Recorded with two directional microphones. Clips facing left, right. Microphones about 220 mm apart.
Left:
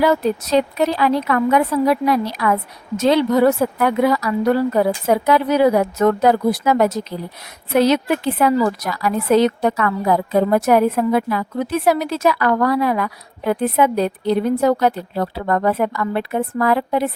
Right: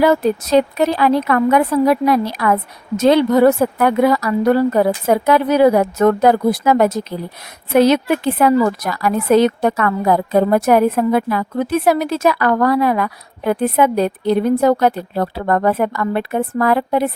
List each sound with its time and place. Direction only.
0.0 s a woman's voice: 50° right (ahead or behind)